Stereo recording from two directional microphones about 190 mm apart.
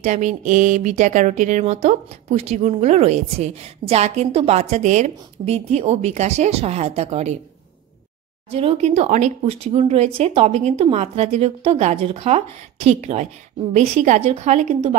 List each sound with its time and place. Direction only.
0.0 s speech: 40° right (ahead or behind)
8.5 s speech: 30° right (ahead or behind)